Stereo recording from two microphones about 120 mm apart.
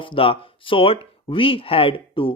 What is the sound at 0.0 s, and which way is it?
Speech, 45° left (ahead or behind).